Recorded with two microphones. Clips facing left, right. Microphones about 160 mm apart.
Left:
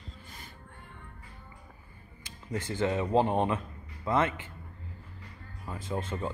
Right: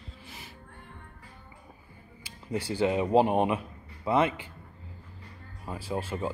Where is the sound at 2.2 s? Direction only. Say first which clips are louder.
Right 3 dB; 10° right (ahead or behind).